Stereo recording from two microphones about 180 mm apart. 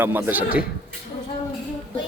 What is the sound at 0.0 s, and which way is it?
Speech, 10° right (ahead or behind).